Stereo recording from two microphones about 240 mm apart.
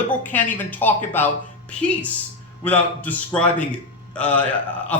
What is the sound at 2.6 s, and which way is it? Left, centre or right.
A man's voice, centre.